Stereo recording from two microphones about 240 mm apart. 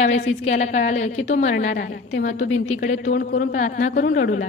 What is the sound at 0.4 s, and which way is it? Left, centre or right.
A woman's voice, left.